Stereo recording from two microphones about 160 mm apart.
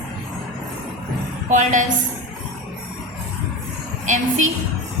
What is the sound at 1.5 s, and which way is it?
Speech, 50° right (ahead or behind).